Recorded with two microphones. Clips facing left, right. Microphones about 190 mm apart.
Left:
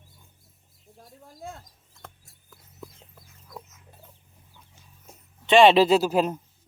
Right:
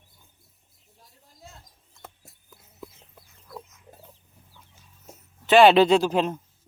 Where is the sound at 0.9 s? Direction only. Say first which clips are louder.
Left 10 dB; 55° left (ahead or behind).